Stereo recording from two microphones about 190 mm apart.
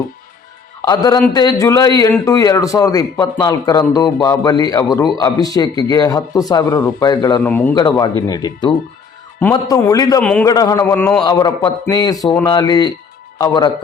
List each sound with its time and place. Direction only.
0.9 s a man's voice: 20° left (ahead or behind)
7.4 s a man's voice: 10° left (ahead or behind)
7.7 s speech: 20° left (ahead or behind)
10.2 s a man's voice: 5° left (ahead or behind)
10.5 s a man's voice: 20° left (ahead or behind)
11.3 s speech: 20° left (ahead or behind)